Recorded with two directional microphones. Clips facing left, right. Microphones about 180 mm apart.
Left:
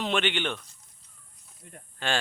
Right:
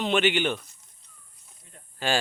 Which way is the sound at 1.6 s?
55° left (ahead or behind).